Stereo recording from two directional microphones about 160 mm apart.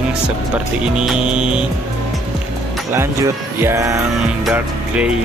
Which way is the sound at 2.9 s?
15° right (ahead or behind).